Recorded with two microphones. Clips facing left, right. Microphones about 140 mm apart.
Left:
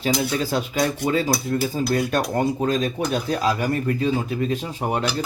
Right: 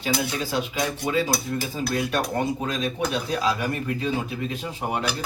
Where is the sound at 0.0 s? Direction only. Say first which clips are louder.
Left 4 dB; 40° left (ahead or behind).